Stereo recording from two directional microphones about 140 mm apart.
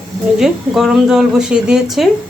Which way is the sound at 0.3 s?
5° right (ahead or behind).